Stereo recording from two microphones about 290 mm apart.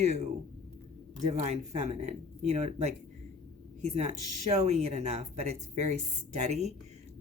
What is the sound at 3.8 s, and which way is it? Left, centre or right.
Speech, right.